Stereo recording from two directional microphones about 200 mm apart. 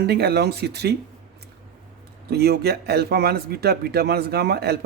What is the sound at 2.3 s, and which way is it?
Speech, 55° right (ahead or behind).